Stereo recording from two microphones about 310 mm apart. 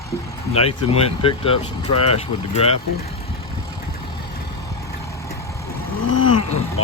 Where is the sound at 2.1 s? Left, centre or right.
Centre.